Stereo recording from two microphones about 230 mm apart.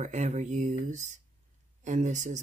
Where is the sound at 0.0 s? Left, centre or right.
Right.